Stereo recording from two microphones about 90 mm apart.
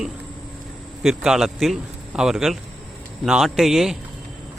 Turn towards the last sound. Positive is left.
turn(degrees=-5)  # may be behind; listen again after turning